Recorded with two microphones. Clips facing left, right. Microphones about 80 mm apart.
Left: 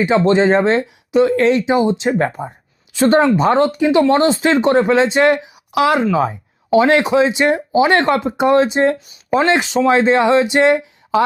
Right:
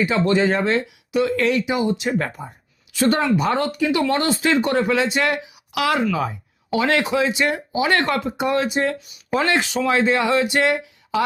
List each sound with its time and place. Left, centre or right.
0.0 s speech: left